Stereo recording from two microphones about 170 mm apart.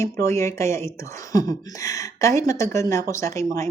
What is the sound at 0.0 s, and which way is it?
Speech, 15° left (ahead or behind).